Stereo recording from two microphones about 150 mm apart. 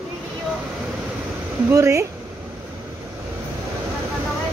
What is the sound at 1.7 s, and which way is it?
Speech, 20° right (ahead or behind).